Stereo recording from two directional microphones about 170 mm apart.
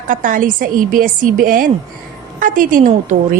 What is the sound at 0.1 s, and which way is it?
A woman's voice, 55° right (ahead or behind).